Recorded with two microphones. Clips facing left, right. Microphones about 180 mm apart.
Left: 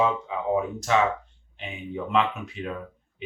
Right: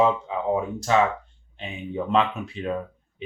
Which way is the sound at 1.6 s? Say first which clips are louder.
Right 3 dB; 35° right (ahead or behind).